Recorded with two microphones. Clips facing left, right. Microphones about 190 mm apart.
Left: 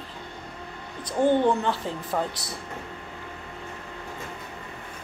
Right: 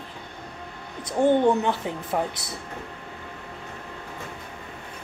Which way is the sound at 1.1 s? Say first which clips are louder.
Right 2 dB; 15° right (ahead or behind).